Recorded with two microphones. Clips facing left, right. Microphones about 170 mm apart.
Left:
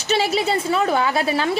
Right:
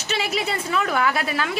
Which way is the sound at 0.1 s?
30° left (ahead or behind).